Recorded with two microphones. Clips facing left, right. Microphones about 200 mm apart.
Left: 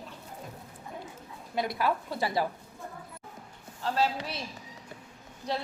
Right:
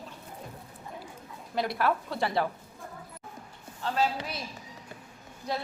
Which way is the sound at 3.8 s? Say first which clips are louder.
Even; 35° left (ahead or behind).